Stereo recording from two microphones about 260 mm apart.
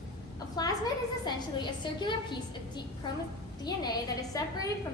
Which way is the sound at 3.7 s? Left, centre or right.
Centre.